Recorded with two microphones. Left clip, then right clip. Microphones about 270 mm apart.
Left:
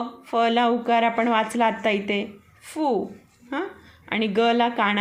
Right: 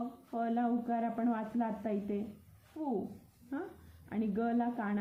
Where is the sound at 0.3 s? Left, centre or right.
Left.